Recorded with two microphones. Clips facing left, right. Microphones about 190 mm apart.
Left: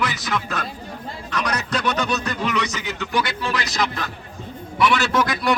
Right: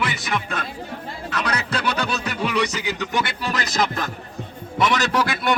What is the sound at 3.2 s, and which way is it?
Speech, 40° right (ahead or behind).